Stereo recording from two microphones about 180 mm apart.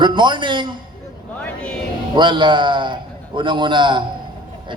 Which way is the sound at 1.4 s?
10° left (ahead or behind).